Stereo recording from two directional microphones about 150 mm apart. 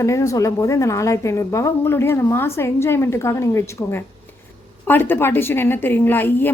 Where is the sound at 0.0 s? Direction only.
20° left (ahead or behind).